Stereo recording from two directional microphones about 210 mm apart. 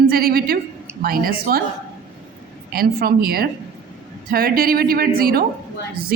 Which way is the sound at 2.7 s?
45° right (ahead or behind).